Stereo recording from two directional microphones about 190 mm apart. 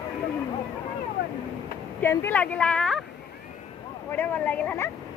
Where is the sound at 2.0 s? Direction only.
10° left (ahead or behind).